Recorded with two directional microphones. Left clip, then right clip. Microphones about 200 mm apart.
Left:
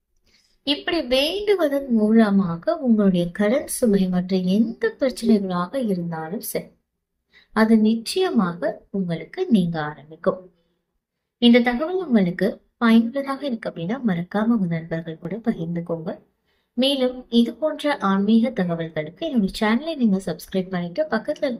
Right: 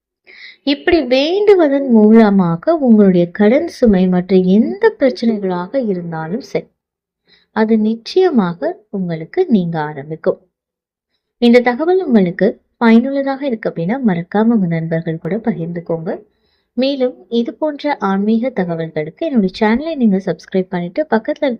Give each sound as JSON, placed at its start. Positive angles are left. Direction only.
{"t": 0.6, "sound": "a woman's voice", "side_deg": -40}
{"t": 11.3, "sound": "a woman's voice", "side_deg": -40}